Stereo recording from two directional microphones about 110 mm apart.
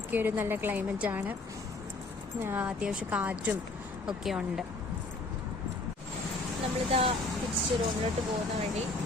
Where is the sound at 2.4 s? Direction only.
20° right (ahead or behind).